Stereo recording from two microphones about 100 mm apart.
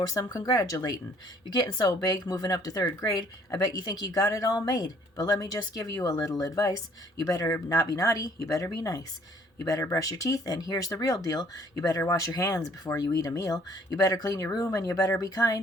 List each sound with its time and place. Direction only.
0.1 s speech: 35° left (ahead or behind)